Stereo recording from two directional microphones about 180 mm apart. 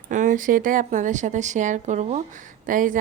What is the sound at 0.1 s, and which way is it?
A woman's voice, 45° right (ahead or behind).